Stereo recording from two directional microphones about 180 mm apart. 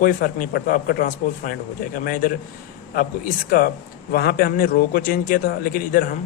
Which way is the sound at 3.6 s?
50° left (ahead or behind).